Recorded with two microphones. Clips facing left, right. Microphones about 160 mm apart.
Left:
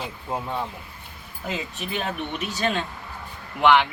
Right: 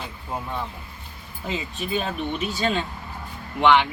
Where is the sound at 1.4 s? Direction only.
Centre (ahead or behind).